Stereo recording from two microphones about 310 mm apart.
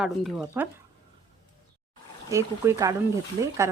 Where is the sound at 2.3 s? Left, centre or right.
Centre.